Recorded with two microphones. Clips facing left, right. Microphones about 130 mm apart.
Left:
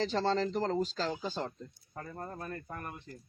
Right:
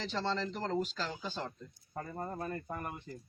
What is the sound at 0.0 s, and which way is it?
Speech, 40° left (ahead or behind).